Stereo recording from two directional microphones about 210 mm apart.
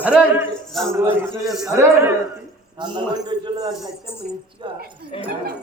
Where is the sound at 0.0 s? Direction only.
5° right (ahead or behind).